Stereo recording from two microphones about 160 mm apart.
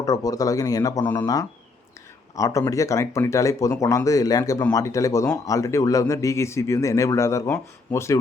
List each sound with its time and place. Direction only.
0.0 s a man's voice: 20° left (ahead or behind)
1.0 s speech: 10° left (ahead or behind)
2.3 s a man's voice: 20° left (ahead or behind)